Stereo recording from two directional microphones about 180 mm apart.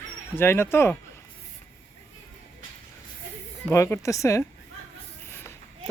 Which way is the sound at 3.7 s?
15° left (ahead or behind).